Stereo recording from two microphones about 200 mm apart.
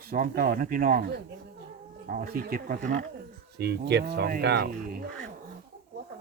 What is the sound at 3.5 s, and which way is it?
Speech, 55° right (ahead or behind).